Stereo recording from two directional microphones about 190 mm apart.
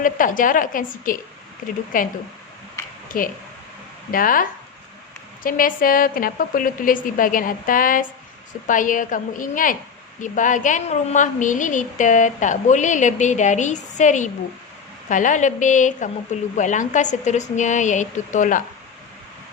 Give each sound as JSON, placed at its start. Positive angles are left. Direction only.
{"t": 0.0, "sound": "a woman's voice", "side_deg": 45}
{"t": 3.1, "sound": "a woman's voice", "side_deg": 50}